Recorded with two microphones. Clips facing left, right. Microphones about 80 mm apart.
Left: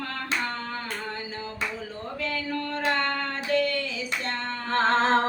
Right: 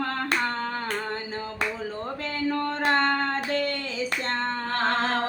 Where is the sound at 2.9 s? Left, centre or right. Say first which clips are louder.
Right 4 dB; right.